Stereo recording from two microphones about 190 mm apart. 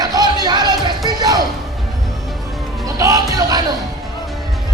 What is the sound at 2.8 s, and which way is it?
Music, 15° right (ahead or behind).